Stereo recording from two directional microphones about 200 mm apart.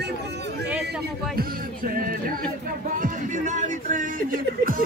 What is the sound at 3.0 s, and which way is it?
Music, 40° right (ahead or behind).